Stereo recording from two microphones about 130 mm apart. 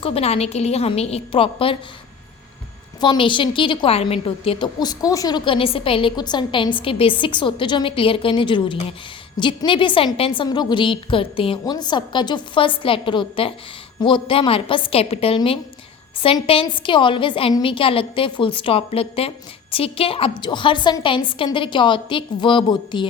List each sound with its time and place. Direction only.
0.0 s a woman's voice: 50° left (ahead or behind)
3.0 s a woman's voice: 35° left (ahead or behind)
4.8 s a woman's voice: 30° left (ahead or behind)
5.5 s a woman's voice: 45° left (ahead or behind)
11.6 s a woman's voice: 35° left (ahead or behind)